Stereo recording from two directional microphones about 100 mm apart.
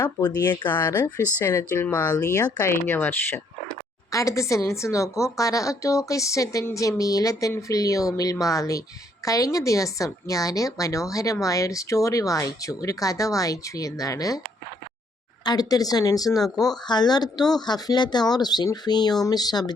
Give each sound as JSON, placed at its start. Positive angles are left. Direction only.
{"t": 0.0, "sound": "speech", "side_deg": 45}
{"t": 1.5, "sound": "speech", "side_deg": 20}
{"t": 2.0, "sound": "a woman's voice", "side_deg": 35}
{"t": 2.7, "sound": "speech", "side_deg": 20}
{"t": 4.1, "sound": "a woman's voice", "side_deg": 30}
{"t": 15.4, "sound": "a woman's voice", "side_deg": 40}